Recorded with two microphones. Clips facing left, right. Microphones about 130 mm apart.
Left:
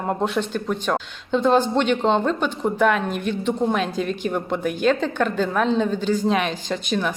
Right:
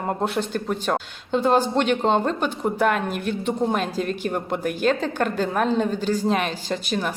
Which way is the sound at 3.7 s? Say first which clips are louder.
Left 1 dB; 45° right (ahead or behind).